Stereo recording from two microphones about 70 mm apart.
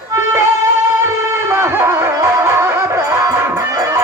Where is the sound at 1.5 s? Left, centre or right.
Right.